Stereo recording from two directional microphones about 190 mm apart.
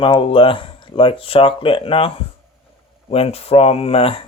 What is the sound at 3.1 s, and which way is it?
Speech, 30° left (ahead or behind).